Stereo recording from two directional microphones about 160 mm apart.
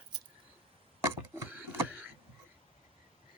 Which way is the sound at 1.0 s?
15° right (ahead or behind).